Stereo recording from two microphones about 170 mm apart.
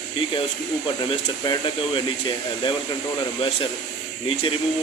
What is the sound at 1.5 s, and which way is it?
Speech, 30° left (ahead or behind).